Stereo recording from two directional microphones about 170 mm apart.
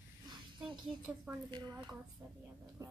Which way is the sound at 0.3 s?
25° right (ahead or behind).